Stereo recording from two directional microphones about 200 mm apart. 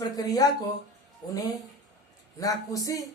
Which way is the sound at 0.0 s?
15° left (ahead or behind).